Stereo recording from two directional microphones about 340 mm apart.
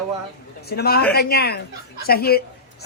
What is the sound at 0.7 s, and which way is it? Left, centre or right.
A man's voice, left.